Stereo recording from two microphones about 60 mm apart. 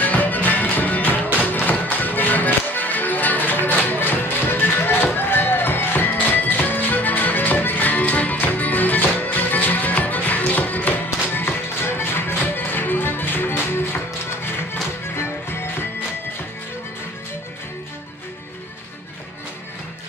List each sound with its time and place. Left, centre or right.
0.0 s music: left
15.1 s music: left